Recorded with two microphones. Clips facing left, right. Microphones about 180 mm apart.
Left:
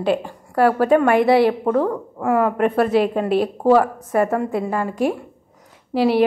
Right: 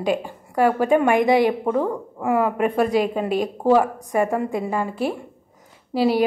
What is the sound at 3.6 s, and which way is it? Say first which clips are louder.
Speech: left 1 dB; 15° right (ahead or behind).